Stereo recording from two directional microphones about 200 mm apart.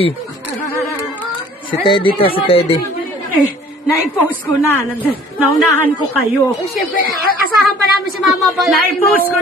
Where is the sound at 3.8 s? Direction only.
10° left (ahead or behind).